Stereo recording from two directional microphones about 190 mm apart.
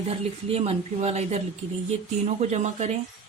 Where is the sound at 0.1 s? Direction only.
30° right (ahead or behind).